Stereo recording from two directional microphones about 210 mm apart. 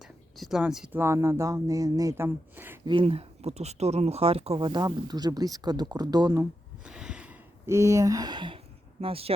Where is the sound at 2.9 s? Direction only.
25° right (ahead or behind).